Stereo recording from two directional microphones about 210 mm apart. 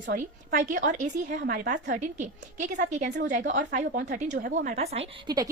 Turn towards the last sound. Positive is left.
turn(degrees=-30)  # may be behind; listen again after turning